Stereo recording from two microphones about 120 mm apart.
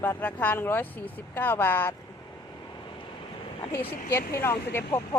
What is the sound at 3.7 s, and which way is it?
Speech, 25° left (ahead or behind).